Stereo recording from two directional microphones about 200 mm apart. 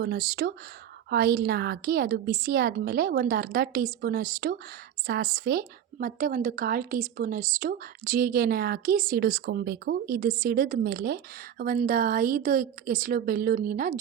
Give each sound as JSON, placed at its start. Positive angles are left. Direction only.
{"t": 0.0, "sound": "a woman's voice", "side_deg": -50}